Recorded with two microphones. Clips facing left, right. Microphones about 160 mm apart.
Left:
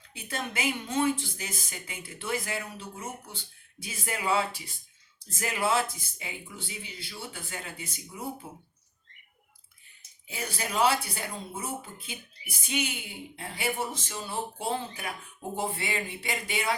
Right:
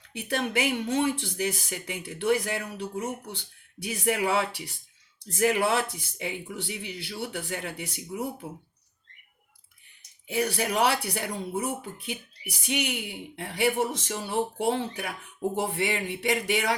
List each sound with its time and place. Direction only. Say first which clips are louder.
0.1 s speech: right 7 dB; 75° right (ahead or behind)
10.2 s speech: right 9 dB; 70° right (ahead or behind)